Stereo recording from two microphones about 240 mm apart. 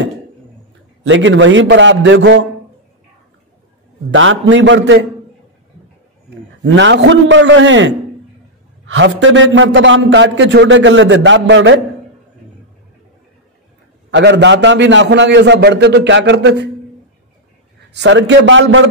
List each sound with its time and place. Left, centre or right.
1.0 s a man's voice: right
4.1 s a man's voice: right
6.6 s a man's voice: right
14.1 s a man's voice: right
17.9 s a man's voice: right